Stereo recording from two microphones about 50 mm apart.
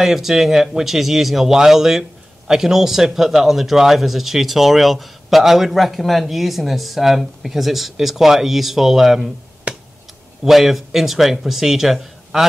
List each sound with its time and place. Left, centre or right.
0.0 s a man's voice: centre
9.7 s tick: right
10.4 s a man's voice: centre